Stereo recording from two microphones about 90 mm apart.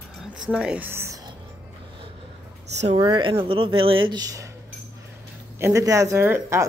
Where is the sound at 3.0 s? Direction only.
70° right (ahead or behind).